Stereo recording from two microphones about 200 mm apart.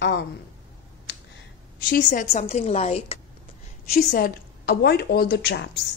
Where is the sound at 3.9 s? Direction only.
50° left (ahead or behind).